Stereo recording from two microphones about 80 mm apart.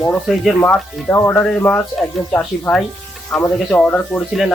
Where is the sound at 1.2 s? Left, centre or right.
Centre.